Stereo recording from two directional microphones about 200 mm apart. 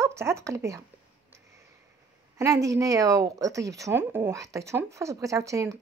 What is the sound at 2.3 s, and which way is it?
Speech, 15° right (ahead or behind).